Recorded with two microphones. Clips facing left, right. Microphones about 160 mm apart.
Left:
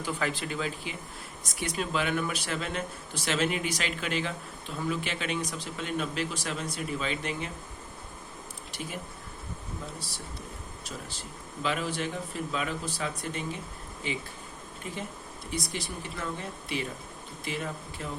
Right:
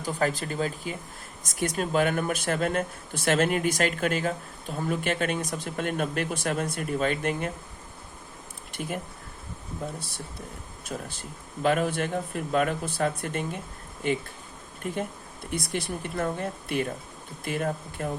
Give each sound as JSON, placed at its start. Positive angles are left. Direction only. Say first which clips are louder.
{"t": 0.0, "sound": "speech", "louder": "right 4 dB", "side_deg": -40}
{"t": 8.7, "sound": "speech", "louder": "right 6 dB", "side_deg": -55}
{"t": 15.4, "sound": "speech", "louder": "right 4 dB", "side_deg": -55}